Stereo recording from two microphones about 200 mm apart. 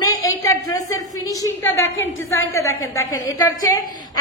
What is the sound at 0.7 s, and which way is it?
A woman's voice, 15° left (ahead or behind).